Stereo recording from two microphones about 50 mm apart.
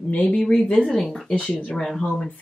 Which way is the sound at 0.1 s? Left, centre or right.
Left.